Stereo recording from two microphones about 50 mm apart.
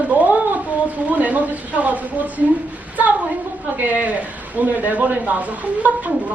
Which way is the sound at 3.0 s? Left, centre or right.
Right.